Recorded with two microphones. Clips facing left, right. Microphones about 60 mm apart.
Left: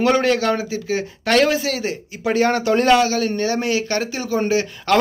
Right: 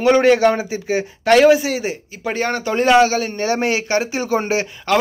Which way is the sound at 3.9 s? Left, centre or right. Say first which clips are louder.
Right 3 dB; centre.